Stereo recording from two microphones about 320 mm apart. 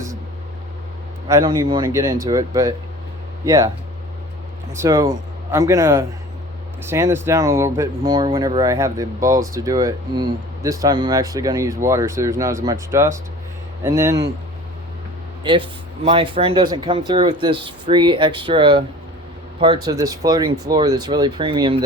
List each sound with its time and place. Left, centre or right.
1.3 s speech: centre
4.7 s speech: centre
16.0 s speech: centre